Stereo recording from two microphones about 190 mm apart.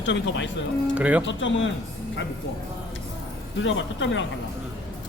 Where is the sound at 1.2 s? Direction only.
80° left.